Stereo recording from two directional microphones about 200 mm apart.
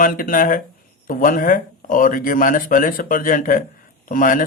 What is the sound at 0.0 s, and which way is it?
Speech, 45° left (ahead or behind).